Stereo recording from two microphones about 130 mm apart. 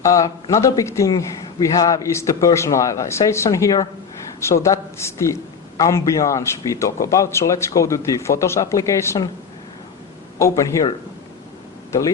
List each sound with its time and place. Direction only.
0.0 s a man's voice: 25° left (ahead or behind)
10.3 s speech: 25° left (ahead or behind)